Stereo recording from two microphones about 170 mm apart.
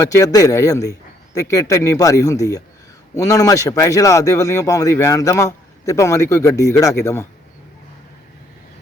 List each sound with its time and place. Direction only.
0.0 s speech: 20° left (ahead or behind)